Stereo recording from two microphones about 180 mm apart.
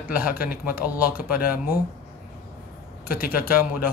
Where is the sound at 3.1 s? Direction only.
55° left (ahead or behind).